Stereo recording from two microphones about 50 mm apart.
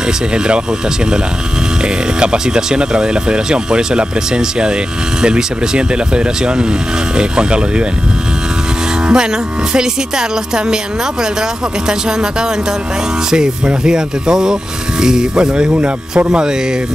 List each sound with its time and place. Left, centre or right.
2.1 s speech: centre
9.0 s speech: centre
11.9 s speech: centre